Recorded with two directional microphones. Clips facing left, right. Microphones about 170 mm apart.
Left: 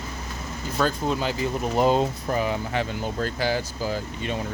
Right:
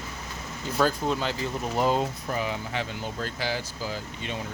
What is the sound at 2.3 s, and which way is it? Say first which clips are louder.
Speech: left 5 dB; 45° left (ahead or behind).